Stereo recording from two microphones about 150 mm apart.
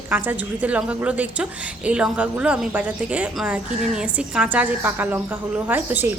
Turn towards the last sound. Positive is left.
turn(degrees=-15)  # may be behind; listen again after turning